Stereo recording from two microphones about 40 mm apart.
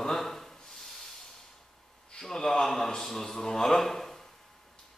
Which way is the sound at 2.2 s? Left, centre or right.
Centre.